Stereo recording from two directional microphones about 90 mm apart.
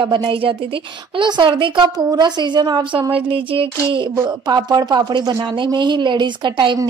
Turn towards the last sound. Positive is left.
turn(degrees=-60)  # may be behind; listen again after turning